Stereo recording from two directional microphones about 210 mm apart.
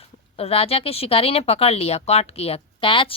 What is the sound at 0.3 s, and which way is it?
A woman's voice, 25° left (ahead or behind).